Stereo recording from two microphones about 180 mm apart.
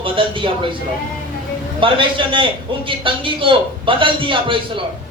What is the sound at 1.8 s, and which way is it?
A man's voice, 30° right (ahead or behind).